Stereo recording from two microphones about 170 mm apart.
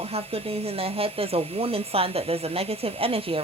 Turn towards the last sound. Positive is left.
turn(degrees=-35)  # may be behind; listen again after turning